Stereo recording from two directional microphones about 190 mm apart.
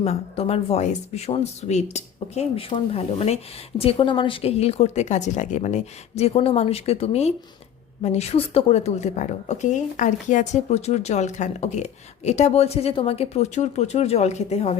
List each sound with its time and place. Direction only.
0.0 s speech: 35° left (ahead or behind)